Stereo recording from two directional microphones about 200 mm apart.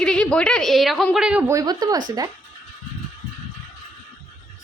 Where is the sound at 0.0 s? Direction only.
5° left (ahead or behind); by 2.3 s 20° right (ahead or behind).